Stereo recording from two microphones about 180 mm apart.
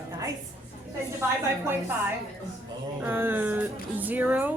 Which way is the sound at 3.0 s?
10° right (ahead or behind).